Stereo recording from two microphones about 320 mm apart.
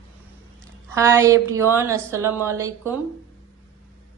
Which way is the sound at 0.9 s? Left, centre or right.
Centre.